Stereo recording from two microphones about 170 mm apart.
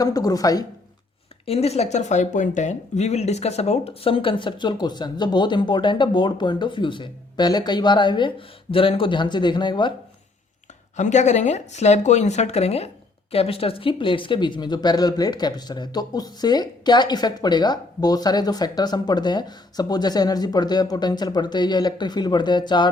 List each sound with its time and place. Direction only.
0.0 s speech: 20° left (ahead or behind)
1.5 s speech: 35° left (ahead or behind)
10.9 s speech: 45° left (ahead or behind); by 22.9 s 25° left (ahead or behind)